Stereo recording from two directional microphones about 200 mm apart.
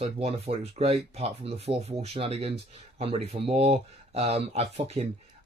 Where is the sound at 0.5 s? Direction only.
30° right (ahead or behind).